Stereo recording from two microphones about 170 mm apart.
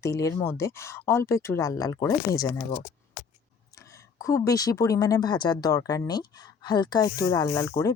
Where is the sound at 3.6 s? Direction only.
20° left (ahead or behind).